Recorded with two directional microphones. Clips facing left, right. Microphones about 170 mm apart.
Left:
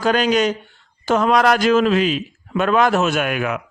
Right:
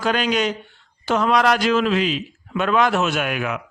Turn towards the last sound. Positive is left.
turn(degrees=50)  # may be behind; listen again after turning